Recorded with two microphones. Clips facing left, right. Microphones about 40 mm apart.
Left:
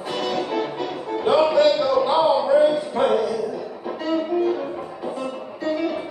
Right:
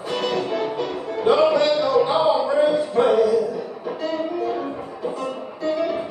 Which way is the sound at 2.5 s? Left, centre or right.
Centre.